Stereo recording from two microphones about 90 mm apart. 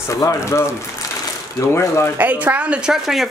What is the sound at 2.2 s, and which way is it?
A woman's voice, 20° right (ahead or behind).